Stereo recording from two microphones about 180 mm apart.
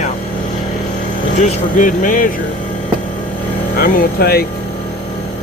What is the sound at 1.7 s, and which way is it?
Speech, 45° left (ahead or behind).